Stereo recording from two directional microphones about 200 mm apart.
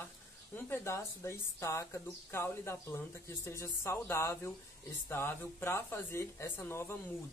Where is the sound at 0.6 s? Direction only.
10° left (ahead or behind).